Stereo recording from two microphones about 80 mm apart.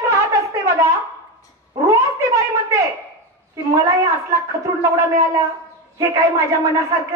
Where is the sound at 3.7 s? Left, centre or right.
Right.